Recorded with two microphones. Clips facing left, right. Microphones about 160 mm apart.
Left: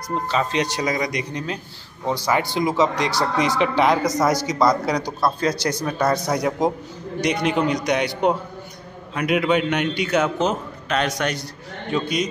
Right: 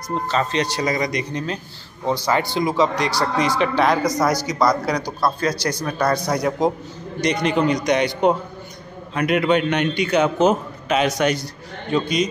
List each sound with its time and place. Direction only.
0.3 s a man's voice: 10° left (ahead or behind)